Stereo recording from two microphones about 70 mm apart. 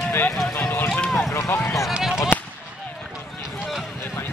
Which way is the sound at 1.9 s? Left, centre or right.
Centre.